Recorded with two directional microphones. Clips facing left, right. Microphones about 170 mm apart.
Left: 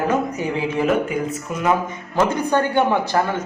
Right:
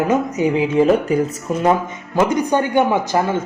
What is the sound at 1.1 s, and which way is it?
Speech, 40° right (ahead or behind).